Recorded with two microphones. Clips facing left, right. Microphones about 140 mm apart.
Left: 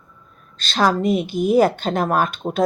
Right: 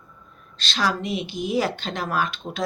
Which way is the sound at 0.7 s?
45° left (ahead or behind).